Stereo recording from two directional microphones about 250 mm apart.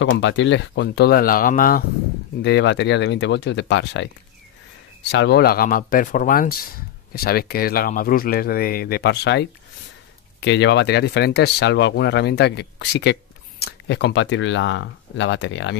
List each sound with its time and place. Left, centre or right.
0.0 s speech: left
5.1 s speech: left